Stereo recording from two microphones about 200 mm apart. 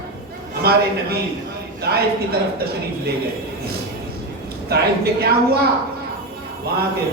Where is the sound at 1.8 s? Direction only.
50° right (ahead or behind).